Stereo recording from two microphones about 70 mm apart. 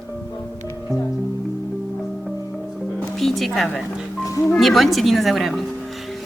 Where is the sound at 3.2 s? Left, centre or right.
Centre.